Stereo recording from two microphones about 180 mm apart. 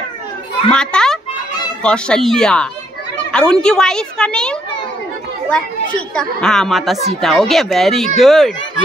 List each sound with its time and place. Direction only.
0.7 s a child's voice: 5° left (ahead or behind)